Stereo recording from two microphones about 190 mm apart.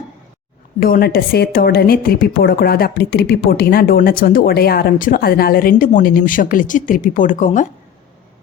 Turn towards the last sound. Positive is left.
turn(degrees=40)  # may be behind; listen again after turning